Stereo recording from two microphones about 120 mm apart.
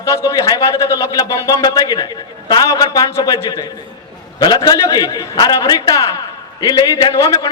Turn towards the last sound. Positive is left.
turn(degrees=35)  # may be behind; listen again after turning